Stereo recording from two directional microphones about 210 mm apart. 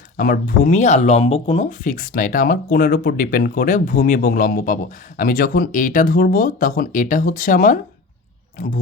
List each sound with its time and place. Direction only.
0.2 s speech: 40° left (ahead or behind)